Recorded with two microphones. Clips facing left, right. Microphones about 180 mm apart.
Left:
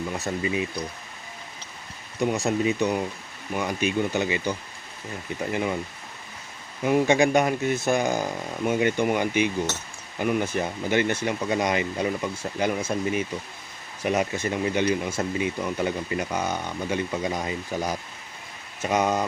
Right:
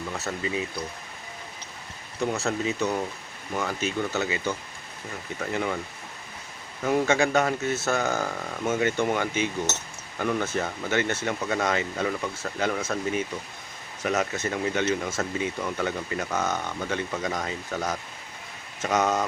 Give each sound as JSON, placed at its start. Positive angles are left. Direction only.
{"t": 0.2, "sound": "speech", "side_deg": 15}
{"t": 2.2, "sound": "speech", "side_deg": 15}
{"t": 5.4, "sound": "speech", "side_deg": 10}
{"t": 6.8, "sound": "speech", "side_deg": 15}